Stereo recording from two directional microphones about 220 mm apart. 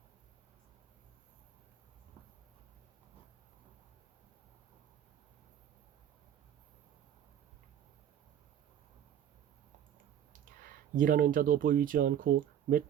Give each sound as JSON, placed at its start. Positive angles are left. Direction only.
{"t": 10.3, "sound": "speech", "side_deg": -40}